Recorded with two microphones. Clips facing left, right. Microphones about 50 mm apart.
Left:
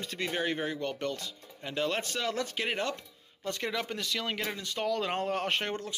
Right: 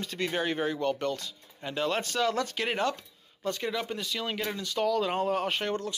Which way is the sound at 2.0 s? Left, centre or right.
Left.